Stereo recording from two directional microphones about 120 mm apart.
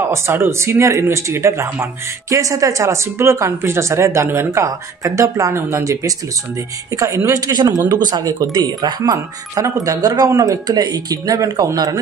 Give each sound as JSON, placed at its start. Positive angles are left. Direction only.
{"t": 0.1, "sound": "speech", "side_deg": -20}